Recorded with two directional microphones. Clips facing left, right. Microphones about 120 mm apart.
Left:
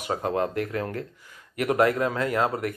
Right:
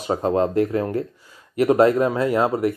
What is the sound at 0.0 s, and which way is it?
Speech, 30° right (ahead or behind).